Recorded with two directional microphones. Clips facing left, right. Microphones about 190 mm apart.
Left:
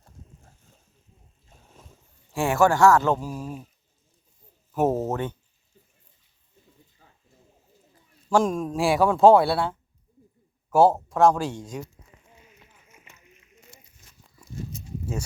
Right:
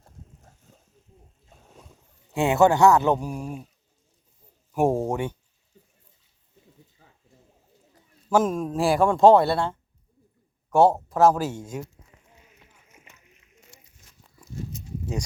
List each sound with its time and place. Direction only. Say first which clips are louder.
2.3 s speech: right 2 dB; 20° right (ahead or behind)
4.7 s speech: right 1 dB; 10° right (ahead or behind)
8.3 s speech: even; 5° right (ahead or behind)